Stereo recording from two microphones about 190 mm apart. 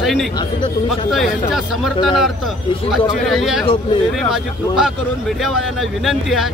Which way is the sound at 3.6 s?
30° left (ahead or behind).